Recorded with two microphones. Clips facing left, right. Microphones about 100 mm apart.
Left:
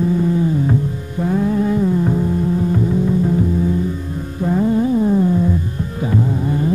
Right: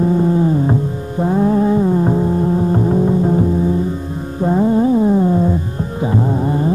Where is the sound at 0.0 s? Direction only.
35° right (ahead or behind).